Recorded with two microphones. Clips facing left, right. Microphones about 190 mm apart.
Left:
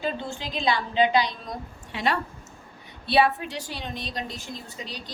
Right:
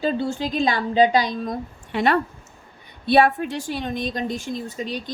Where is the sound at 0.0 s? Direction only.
45° right (ahead or behind).